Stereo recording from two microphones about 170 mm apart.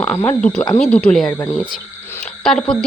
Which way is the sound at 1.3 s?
20° left (ahead or behind).